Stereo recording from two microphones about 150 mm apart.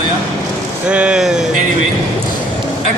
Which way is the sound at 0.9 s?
5° right (ahead or behind).